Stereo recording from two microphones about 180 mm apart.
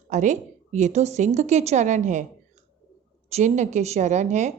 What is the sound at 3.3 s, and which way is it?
A woman's voice, 40° right (ahead or behind).